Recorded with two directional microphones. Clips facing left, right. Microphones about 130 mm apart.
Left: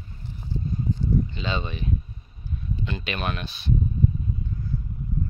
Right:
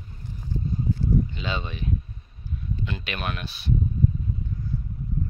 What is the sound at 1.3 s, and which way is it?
Speech, 5° right (ahead or behind).